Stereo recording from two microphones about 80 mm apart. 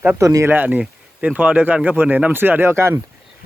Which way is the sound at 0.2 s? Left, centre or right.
Right.